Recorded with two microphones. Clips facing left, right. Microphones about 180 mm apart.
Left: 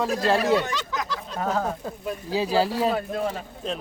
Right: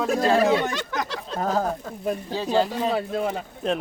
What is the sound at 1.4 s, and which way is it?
Speech, 35° right (ahead or behind).